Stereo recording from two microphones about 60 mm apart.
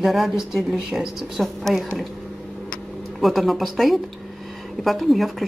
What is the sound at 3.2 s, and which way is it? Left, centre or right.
Speech, centre.